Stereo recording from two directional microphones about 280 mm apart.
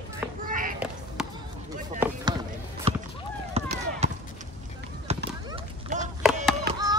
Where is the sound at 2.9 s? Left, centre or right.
Right.